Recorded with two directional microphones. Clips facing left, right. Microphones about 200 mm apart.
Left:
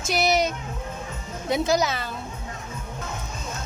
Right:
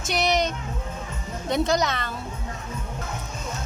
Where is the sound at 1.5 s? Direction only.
5° left (ahead or behind).